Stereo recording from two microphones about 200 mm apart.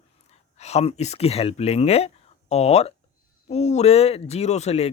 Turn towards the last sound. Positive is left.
turn(degrees=30)  # may be behind; listen again after turning